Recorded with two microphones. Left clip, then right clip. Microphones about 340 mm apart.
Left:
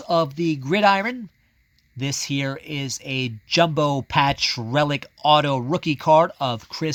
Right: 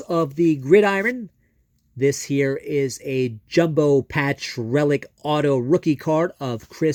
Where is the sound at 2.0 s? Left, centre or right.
Centre.